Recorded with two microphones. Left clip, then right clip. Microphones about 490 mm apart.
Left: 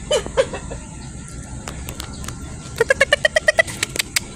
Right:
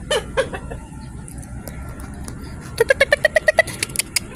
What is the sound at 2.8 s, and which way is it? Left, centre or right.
Vehicle, right.